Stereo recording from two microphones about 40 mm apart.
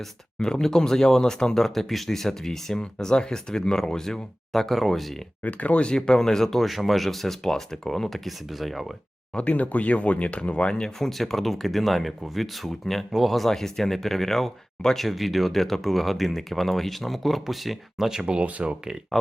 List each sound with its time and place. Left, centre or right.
0.3 s speech: left
2.7 s speech: centre
5.4 s speech: left
5.9 s speech: centre
6.7 s speech: centre
9.3 s speech: left
11.0 s speech: centre
18.4 s speech: right
19.1 s speech: centre